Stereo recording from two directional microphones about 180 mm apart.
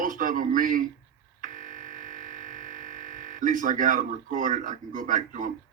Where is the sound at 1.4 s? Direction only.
45° right (ahead or behind).